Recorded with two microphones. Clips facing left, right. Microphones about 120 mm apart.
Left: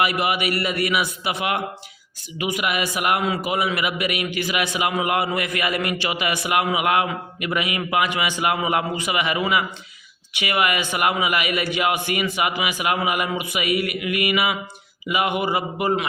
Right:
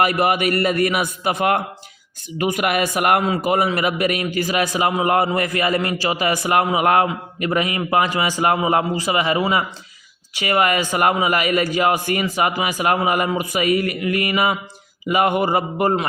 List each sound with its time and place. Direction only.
0.0 s a man's voice: 45° right (ahead or behind)